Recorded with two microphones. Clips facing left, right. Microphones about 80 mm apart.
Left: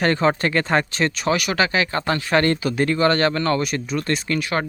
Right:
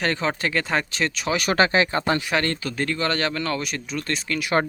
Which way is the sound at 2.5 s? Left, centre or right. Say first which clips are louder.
Left 6 dB; centre.